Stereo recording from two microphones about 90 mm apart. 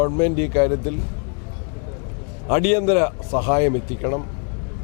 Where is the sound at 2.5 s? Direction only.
15° left (ahead or behind).